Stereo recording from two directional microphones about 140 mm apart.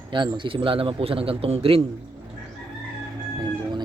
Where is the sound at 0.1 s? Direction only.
35° right (ahead or behind).